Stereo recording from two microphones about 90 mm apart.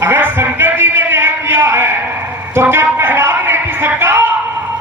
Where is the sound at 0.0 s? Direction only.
25° right (ahead or behind).